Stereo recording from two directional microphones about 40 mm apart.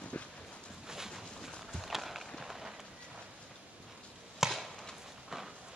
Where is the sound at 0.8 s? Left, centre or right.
Centre.